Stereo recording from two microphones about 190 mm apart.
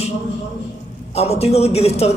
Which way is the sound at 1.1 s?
35° left (ahead or behind).